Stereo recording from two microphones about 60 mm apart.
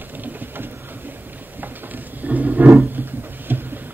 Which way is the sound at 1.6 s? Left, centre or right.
Right.